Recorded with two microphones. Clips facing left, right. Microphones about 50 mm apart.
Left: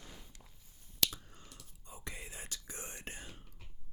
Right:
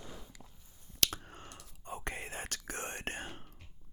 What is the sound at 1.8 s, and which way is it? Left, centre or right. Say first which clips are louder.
Whispering: right 7 dB; right.